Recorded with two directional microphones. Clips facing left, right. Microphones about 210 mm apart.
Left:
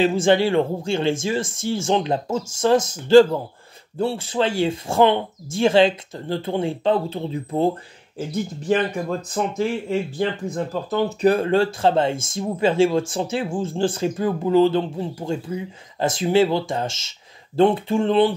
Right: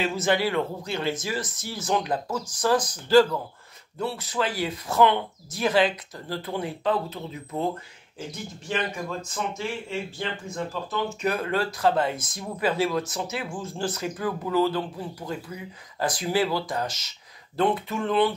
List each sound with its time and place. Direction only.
0.0 s speech: 30° left (ahead or behind)
8.6 s speech: 45° left (ahead or behind); by 18.3 s 30° left (ahead or behind)